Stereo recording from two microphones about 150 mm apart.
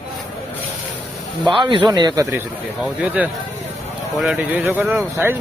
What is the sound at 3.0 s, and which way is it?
Speech, 10° right (ahead or behind).